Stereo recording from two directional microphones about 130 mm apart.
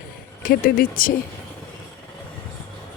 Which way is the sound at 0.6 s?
90° left.